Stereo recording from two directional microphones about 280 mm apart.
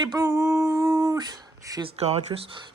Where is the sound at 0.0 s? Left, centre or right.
Centre.